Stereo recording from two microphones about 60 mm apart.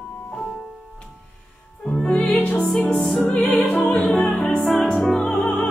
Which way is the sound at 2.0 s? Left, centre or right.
Centre.